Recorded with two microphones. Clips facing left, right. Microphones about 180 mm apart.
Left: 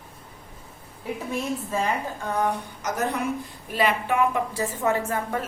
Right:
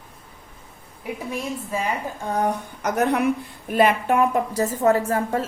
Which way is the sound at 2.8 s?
65° right (ahead or behind).